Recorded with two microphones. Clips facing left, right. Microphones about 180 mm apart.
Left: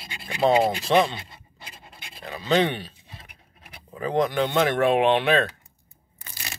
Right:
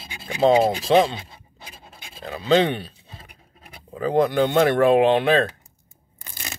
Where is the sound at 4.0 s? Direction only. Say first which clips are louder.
Right 4 dB; 35° right (ahead or behind).